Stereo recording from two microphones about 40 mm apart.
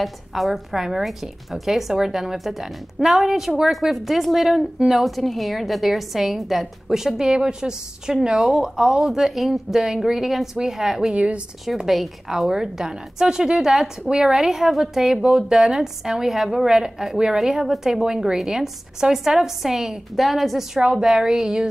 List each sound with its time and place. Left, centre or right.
0.0 s a woman's voice: centre
11.1 s a woman's voice: right
11.7 s a woman's voice: centre
20.8 s a woman's voice: centre